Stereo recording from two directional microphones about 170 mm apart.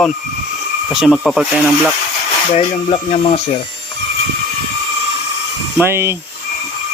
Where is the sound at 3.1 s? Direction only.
35° left (ahead or behind).